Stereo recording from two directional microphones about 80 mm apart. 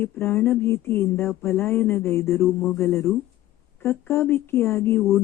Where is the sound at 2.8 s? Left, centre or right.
Left.